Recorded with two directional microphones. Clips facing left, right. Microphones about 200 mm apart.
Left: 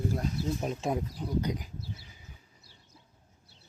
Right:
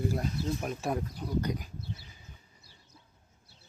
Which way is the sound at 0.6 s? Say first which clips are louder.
Left 1 dB; 20° left (ahead or behind).